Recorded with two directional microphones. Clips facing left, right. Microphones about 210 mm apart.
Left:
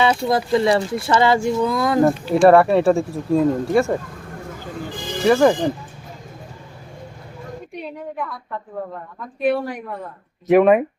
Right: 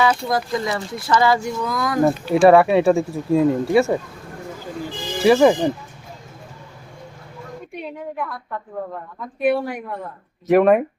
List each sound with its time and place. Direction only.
0.0 s speech: 25° left (ahead or behind)
2.0 s speech: 5° right (ahead or behind)
5.2 s speech: 5° right (ahead or behind)
9.4 s speech: 10° right (ahead or behind)